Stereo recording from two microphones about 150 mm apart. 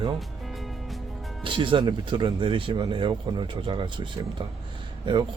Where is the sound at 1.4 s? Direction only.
35° right (ahead or behind).